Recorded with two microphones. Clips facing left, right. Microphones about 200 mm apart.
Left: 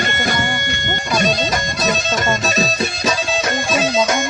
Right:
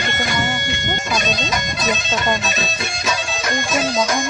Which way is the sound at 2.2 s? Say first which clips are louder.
Left 3 dB; 35° left (ahead or behind).